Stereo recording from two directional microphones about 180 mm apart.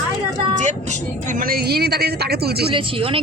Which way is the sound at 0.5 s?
40° right (ahead or behind).